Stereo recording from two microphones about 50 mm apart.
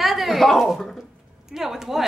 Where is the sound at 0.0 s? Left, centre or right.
Centre.